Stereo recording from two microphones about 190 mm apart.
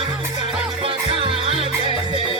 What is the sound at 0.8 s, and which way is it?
Music, 30° right (ahead or behind).